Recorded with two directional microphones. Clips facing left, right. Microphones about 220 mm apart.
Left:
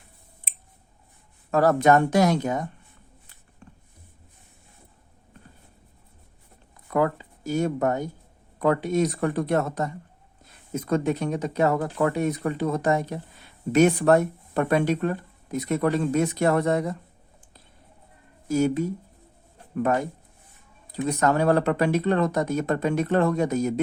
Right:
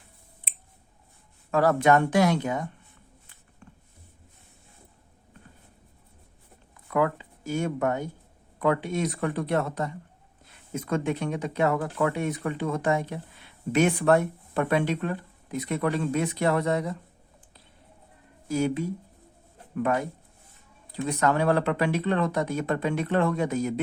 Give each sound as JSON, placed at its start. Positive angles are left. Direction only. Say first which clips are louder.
{"t": 1.5, "sound": "speech", "louder": "left 2 dB", "side_deg": 40}
{"t": 6.9, "sound": "speech", "louder": "left 2 dB", "side_deg": 40}
{"t": 18.4, "sound": "speech", "louder": "left 4 dB", "side_deg": 45}
{"t": 21.1, "sound": "speech", "louder": "left 2 dB", "side_deg": 40}